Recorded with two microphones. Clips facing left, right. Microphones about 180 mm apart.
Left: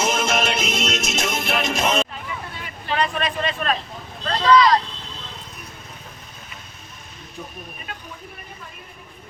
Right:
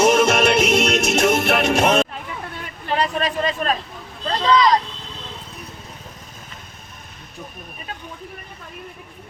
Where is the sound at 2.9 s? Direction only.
35° right (ahead or behind).